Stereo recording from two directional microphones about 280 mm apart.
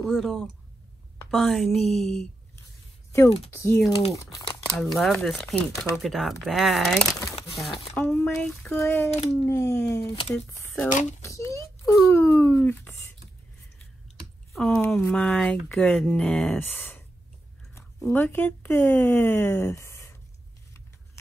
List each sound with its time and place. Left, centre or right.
0.0 s speech: centre
3.4 s speech: centre
4.7 s speech: centre
10.9 s speech: left
11.2 s speech: centre
14.5 s speech: centre